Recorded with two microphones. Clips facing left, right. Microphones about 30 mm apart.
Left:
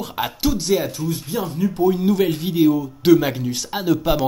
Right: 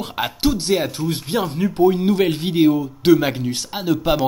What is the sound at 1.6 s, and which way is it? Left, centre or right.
Speech, right.